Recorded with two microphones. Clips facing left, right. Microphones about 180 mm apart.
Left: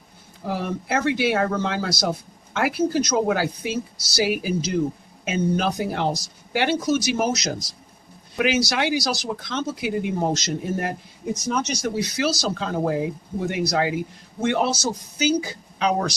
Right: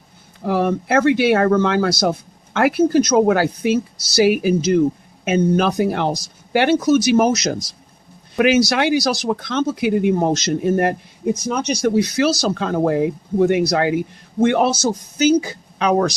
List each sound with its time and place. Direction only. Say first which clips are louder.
0.4 s speech: right 8 dB; 65° right (ahead or behind)